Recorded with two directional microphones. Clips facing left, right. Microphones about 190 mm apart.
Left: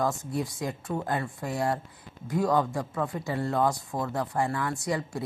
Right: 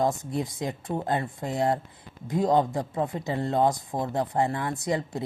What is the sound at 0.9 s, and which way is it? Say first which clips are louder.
Speech: right 3 dB; 20° right (ahead or behind).